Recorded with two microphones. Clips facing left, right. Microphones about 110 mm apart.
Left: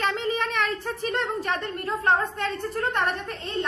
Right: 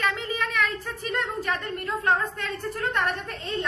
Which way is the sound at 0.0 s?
30° left (ahead or behind).